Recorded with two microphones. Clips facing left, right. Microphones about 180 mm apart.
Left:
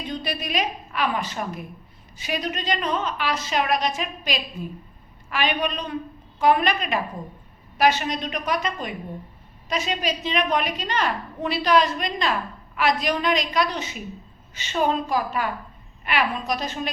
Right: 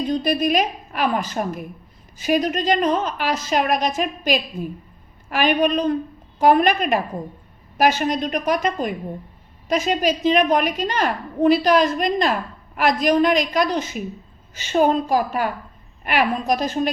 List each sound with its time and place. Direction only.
0.0 s a woman's voice: 40° right (ahead or behind)